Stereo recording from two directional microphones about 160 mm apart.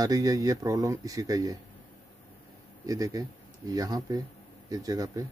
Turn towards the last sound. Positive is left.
turn(degrees=-20)  # may be behind; listen again after turning